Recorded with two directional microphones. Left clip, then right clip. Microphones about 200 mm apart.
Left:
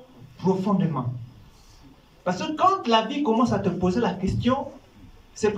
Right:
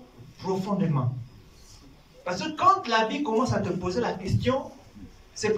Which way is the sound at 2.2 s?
35° left (ahead or behind).